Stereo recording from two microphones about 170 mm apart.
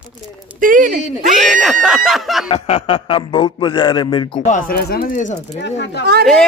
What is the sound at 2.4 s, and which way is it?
A man's voice, 35° left (ahead or behind).